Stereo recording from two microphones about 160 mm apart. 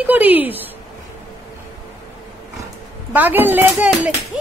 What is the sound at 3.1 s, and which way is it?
Speech, 10° right (ahead or behind).